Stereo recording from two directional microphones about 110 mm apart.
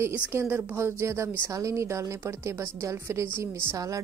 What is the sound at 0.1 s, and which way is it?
A woman's voice, 20° right (ahead or behind).